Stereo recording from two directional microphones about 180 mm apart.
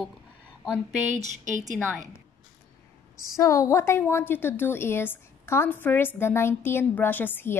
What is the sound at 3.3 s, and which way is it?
A woman's voice, 15° left (ahead or behind).